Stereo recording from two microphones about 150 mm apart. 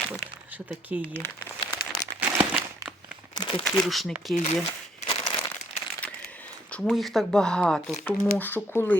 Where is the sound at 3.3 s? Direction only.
30° left (ahead or behind).